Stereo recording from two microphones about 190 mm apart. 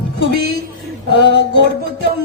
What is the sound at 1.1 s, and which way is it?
Music, 70° left (ahead or behind).